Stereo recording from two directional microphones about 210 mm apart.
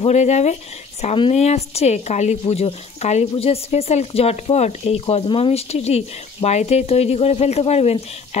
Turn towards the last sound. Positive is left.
turn(degrees=30)  # may be behind; listen again after turning